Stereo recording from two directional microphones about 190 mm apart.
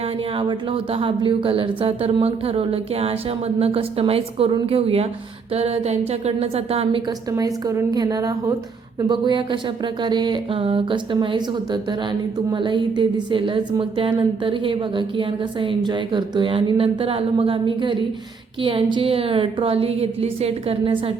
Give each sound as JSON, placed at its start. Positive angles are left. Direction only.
{"t": 0.3, "sound": "speech", "side_deg": -30}
{"t": 7.3, "sound": "a woman's voice", "side_deg": -20}